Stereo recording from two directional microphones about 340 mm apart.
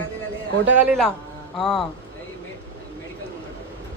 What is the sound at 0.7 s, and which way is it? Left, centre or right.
Speech, centre.